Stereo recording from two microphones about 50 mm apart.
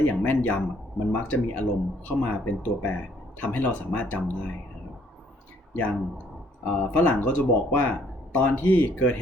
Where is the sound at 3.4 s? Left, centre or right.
Left.